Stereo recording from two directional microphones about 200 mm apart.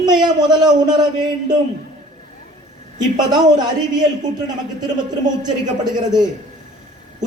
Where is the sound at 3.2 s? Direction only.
20° right (ahead or behind).